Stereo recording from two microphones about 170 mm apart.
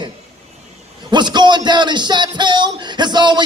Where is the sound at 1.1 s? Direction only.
25° right (ahead or behind).